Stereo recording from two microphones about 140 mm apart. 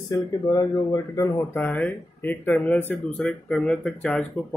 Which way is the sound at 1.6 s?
10° left (ahead or behind).